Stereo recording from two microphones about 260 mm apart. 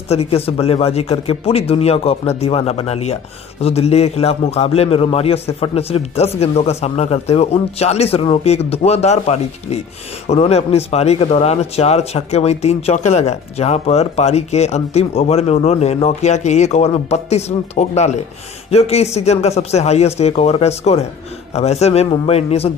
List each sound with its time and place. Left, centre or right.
0.1 s speech: left